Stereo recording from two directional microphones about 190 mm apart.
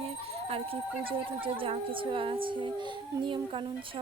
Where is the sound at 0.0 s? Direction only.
30° right (ahead or behind).